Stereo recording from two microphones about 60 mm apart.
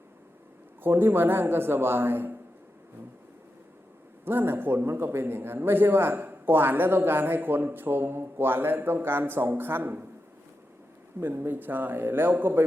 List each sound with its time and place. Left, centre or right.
0.8 s a man's voice: right
4.3 s a man's voice: right
11.2 s a man's voice: right